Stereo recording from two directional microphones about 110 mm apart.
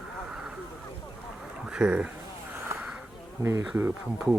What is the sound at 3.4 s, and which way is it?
Speech, 25° right (ahead or behind).